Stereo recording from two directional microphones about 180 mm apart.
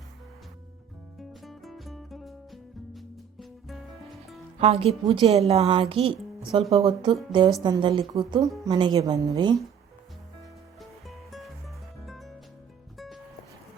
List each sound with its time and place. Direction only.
1.2 s music: centre (ahead or behind)
4.6 s a woman's voice: 35° right (ahead or behind)
10.8 s music: centre (ahead or behind)